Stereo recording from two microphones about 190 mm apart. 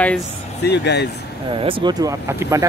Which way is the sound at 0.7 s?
60° left (ahead or behind).